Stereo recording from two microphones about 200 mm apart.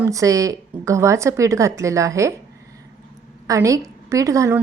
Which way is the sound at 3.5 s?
15° right (ahead or behind).